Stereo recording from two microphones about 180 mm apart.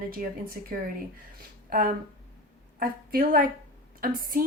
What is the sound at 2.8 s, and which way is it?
Speech, 55° right (ahead or behind).